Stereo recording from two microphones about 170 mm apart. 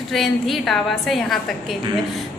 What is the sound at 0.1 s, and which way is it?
A woman's voice, centre (ahead or behind).